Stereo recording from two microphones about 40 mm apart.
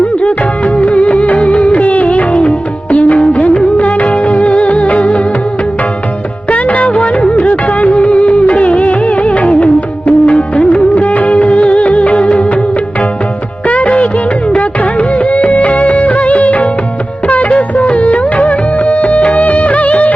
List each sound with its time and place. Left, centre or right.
0.0 s music: left
6.5 s music: left
13.7 s music of bollywood: left
14.6 s music: left